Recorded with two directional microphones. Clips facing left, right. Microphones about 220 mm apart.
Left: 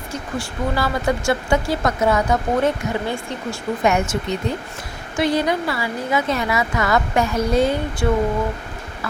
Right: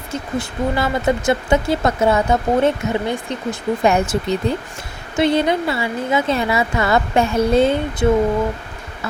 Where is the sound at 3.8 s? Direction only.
35° right (ahead or behind).